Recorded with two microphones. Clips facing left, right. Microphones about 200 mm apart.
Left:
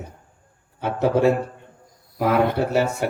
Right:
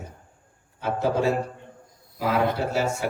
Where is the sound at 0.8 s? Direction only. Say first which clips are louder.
Left 5 dB; 65° left (ahead or behind).